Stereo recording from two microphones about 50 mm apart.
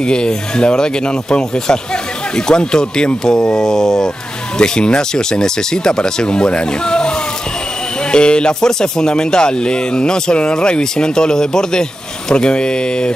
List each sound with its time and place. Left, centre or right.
0.0 s speech: centre